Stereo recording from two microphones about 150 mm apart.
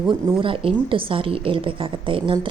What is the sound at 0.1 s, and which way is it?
Speech, 35° right (ahead or behind).